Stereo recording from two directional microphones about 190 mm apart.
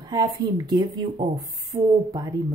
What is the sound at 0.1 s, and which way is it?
A woman's voice, 20° right (ahead or behind).